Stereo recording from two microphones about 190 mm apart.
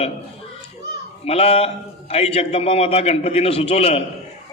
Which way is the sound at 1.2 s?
30° left (ahead or behind).